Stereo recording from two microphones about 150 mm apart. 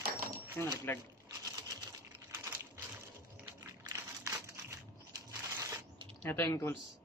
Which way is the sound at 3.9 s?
15° right (ahead or behind).